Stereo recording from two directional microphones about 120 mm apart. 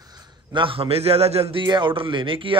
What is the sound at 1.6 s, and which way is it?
Speech, 40° right (ahead or behind).